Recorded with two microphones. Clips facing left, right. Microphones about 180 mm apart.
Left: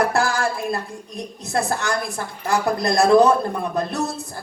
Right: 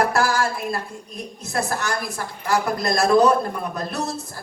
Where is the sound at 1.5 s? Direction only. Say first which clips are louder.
Left 2 dB; 25° left (ahead or behind).